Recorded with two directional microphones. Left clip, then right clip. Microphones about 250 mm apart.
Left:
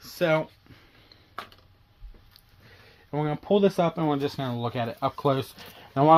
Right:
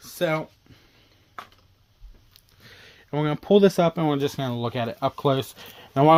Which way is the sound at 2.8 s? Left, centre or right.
Right.